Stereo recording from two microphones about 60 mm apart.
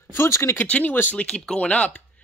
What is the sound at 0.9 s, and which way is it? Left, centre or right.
Speech, left.